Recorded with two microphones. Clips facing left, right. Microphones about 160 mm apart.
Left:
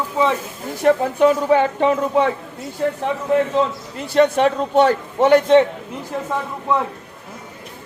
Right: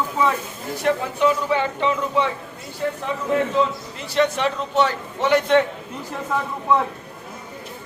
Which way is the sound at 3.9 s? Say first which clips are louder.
Left 6 dB; 50° left (ahead or behind).